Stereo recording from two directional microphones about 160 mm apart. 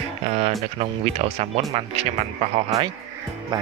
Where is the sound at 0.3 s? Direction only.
40° right (ahead or behind).